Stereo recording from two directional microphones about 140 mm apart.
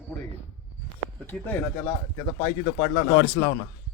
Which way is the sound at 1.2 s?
15° left (ahead or behind).